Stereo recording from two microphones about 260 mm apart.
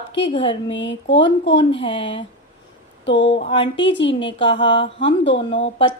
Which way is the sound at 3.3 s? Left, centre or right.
Centre.